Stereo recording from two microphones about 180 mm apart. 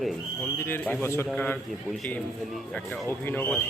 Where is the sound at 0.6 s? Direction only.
10° left (ahead or behind).